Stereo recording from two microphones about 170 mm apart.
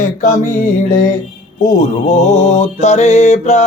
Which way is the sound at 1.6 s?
45° left (ahead or behind).